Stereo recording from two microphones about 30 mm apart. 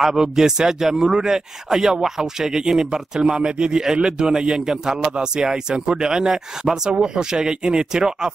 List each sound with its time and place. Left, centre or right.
0.2 s a man's voice: centre